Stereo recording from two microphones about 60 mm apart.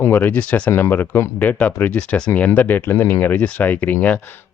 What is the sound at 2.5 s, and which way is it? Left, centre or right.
Speech, left.